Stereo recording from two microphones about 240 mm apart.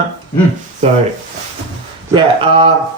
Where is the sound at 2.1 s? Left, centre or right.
Right.